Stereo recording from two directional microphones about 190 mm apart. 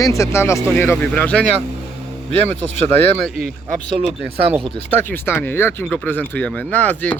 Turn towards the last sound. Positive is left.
turn(degrees=10)  # may be behind; listen again after turning